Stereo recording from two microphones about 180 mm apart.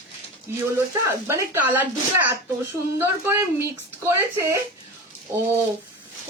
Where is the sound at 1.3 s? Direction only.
15° right (ahead or behind).